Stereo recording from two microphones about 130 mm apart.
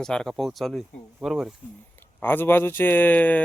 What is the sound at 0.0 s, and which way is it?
Speech, 5° left (ahead or behind).